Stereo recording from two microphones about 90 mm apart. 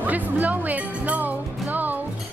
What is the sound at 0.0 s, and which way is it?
Music, 20° right (ahead or behind).